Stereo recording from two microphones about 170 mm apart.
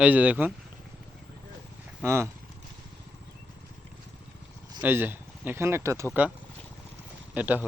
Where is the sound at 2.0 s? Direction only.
15° right (ahead or behind).